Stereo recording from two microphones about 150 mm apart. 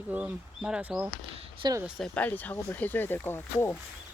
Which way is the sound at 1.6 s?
25° right (ahead or behind).